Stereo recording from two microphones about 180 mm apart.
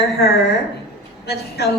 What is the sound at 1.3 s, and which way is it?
Speech, 65° left (ahead or behind).